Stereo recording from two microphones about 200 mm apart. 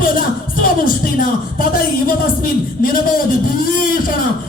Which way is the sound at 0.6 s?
45° left (ahead or behind).